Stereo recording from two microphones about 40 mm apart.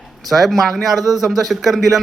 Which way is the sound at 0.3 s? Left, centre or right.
Centre.